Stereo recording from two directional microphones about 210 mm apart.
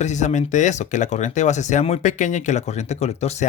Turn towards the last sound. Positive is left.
turn(degrees=30)  # may be behind; listen again after turning